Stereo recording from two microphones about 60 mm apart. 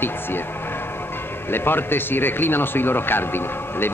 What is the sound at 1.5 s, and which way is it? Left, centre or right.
Speech, left.